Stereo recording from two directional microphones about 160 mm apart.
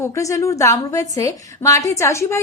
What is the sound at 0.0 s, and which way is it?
A woman's voice, 20° left (ahead or behind).